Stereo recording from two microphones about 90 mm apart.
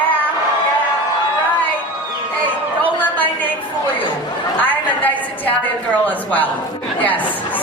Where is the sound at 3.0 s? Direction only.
20° left (ahead or behind).